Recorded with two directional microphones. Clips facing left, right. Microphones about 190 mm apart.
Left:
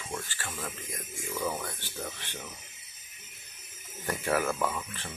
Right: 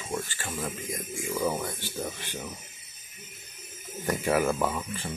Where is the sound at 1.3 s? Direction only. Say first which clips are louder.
Right 4 dB; 10° right (ahead or behind).